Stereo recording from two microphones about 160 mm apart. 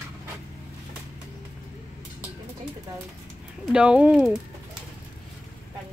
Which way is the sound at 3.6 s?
5° right (ahead or behind).